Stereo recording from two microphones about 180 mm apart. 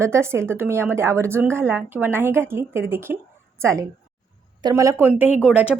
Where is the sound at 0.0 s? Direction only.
15° right (ahead or behind).